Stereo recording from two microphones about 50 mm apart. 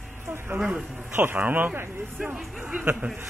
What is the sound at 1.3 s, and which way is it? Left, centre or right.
Speech, right.